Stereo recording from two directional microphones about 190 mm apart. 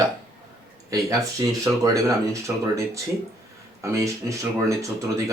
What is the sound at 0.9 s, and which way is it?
A man's voice, 20° right (ahead or behind).